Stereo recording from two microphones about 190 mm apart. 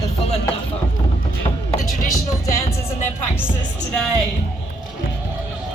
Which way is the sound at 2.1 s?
15° left (ahead or behind).